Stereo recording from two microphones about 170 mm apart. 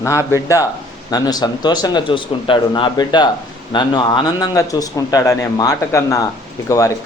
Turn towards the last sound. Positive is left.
turn(degrees=20)  # may be behind; listen again after turning